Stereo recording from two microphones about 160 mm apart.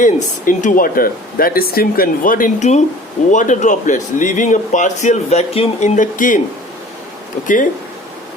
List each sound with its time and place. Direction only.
0.0 s a man's voice: 55° left (ahead or behind)
7.4 s speech: 55° left (ahead or behind)